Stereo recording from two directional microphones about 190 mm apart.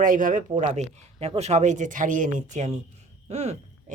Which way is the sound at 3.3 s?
35° right (ahead or behind).